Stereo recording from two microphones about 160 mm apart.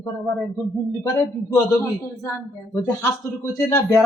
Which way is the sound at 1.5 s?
15° left (ahead or behind).